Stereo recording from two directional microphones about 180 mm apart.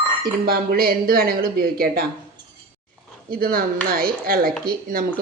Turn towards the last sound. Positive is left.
turn(degrees=-55)  # may be behind; listen again after turning